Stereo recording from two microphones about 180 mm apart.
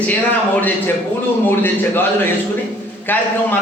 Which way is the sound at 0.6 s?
10° left (ahead or behind).